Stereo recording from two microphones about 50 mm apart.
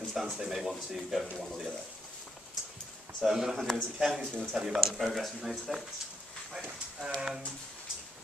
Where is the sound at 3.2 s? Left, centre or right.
Centre.